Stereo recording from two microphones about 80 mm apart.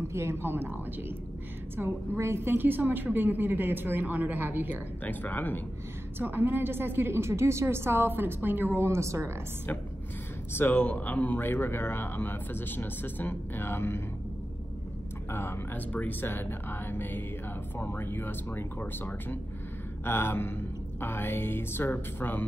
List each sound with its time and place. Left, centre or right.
0.1 s a woman's voice: right
5.0 s speech: left
6.1 s a woman's voice: right
10.5 s speech: left
15.3 s speech: left